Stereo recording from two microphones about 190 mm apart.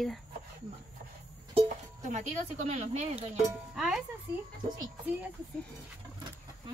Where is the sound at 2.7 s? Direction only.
35° right (ahead or behind).